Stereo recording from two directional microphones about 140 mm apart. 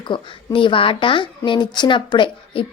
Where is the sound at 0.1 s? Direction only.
35° left (ahead or behind).